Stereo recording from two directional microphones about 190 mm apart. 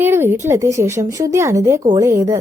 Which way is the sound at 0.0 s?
10° right (ahead or behind).